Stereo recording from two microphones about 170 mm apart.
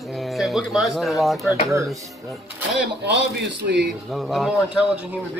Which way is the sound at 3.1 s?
90° right.